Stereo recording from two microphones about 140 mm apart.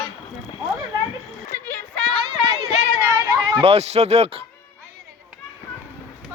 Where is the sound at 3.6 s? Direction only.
50° right (ahead or behind).